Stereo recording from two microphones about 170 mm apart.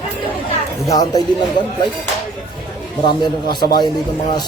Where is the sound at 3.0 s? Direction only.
25° left (ahead or behind).